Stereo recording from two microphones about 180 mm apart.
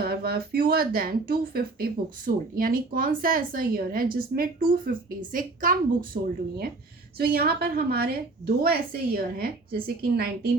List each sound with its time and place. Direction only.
0.0 s speech: 60° right (ahead or behind)
7.2 s a woman's voice: 55° right (ahead or behind)